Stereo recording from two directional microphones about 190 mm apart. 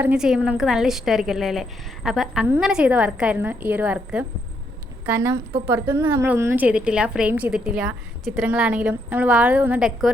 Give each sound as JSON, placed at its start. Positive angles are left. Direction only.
{"t": 0.0, "sound": "a woman's voice", "side_deg": -5}